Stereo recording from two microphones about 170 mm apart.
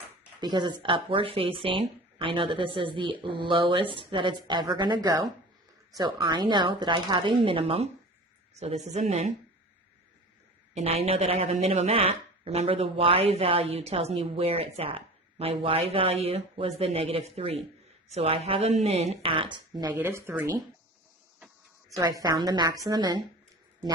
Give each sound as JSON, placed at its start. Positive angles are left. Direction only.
{"t": 0.3, "sound": "a woman's voice", "side_deg": -25}
{"t": 10.8, "sound": "a woman's voice", "side_deg": -40}
{"t": 19.9, "sound": "speech", "side_deg": -10}
{"t": 21.3, "sound": "a sound", "side_deg": -10}
{"t": 21.9, "sound": "speech", "side_deg": -20}